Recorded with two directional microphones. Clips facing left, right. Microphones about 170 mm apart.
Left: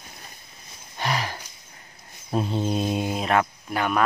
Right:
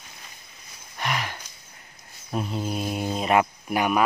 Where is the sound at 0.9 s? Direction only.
35° left (ahead or behind).